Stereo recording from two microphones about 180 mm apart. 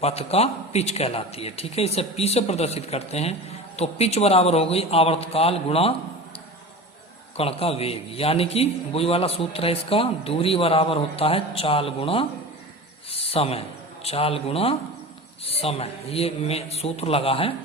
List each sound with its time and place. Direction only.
0.0 s a man's voice: 35° left (ahead or behind)
7.3 s a man's voice: 35° left (ahead or behind)